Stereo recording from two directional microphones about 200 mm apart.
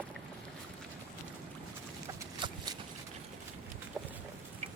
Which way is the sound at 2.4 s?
25° right (ahead or behind).